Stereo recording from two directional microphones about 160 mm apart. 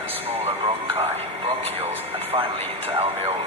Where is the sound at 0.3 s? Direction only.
40° right (ahead or behind).